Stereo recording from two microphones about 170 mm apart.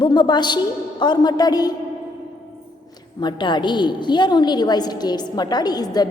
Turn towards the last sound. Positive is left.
turn(degrees=25)  # may be behind; listen again after turning